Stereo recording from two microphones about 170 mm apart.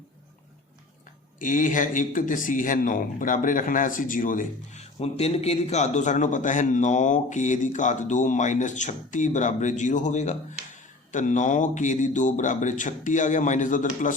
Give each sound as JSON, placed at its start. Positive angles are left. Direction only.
{"t": 1.4, "sound": "speech", "side_deg": 50}